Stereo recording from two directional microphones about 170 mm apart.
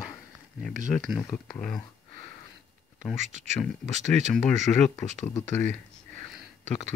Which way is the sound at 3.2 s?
45° right (ahead or behind).